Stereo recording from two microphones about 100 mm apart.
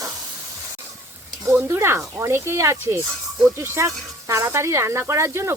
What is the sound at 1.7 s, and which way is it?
Speech, 25° right (ahead or behind).